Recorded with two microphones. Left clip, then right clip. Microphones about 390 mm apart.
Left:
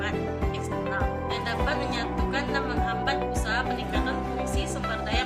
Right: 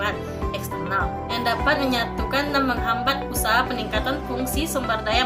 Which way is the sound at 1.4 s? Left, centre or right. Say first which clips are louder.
Right 9 dB; right.